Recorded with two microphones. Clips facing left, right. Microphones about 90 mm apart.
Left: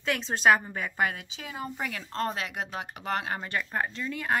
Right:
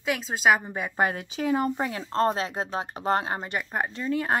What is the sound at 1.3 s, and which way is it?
Speech, 50° right (ahead or behind).